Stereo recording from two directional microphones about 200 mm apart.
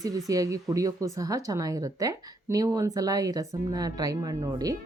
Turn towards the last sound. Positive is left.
turn(degrees=-15)  # may be behind; listen again after turning